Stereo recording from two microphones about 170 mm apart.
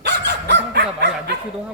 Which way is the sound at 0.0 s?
85° right.